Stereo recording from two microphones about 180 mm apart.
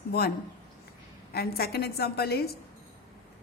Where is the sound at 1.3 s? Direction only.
60° left (ahead or behind).